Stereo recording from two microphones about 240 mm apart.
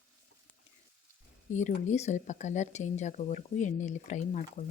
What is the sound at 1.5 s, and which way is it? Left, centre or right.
Speech, left.